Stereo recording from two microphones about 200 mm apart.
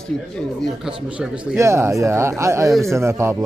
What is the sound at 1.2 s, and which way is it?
Speech, 15° right (ahead or behind).